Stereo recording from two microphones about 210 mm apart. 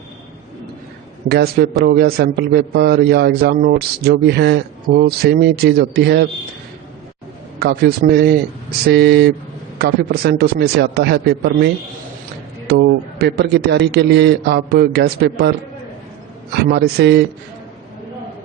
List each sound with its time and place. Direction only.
1.3 s a man's voice: 50° right (ahead or behind)
7.6 s a man's voice: 50° right (ahead or behind)
16.7 s a man's voice: 50° right (ahead or behind)